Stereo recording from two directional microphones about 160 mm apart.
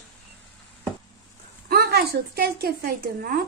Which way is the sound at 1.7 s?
75° right (ahead or behind).